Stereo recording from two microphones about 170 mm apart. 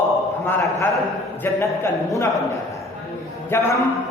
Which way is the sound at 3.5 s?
15° left (ahead or behind).